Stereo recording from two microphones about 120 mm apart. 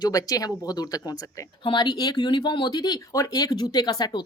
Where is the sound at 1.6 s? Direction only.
40° left (ahead or behind).